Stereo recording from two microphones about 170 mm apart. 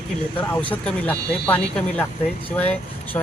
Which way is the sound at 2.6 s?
10° left (ahead or behind).